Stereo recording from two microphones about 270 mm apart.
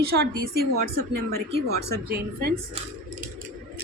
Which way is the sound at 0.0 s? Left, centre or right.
Right.